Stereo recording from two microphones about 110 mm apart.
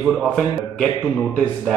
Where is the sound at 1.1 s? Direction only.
5° left (ahead or behind).